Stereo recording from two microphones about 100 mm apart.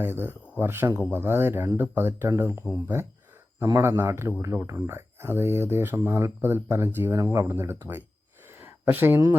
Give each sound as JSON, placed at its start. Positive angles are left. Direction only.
{"t": 0.0, "sound": "speech", "side_deg": -20}